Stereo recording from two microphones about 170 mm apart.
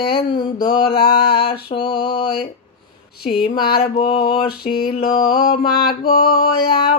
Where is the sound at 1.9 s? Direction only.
65° left (ahead or behind).